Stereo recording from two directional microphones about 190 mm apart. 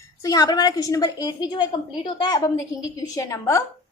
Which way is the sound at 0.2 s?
20° left (ahead or behind).